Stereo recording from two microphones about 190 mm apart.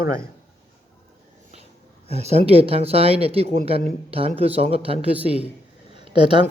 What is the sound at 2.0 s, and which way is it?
Speech, 35° right (ahead or behind).